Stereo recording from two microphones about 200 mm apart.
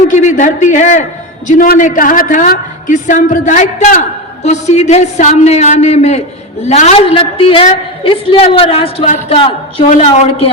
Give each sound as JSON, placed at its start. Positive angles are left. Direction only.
{"t": 0.1, "sound": "a woman's voice", "side_deg": 40}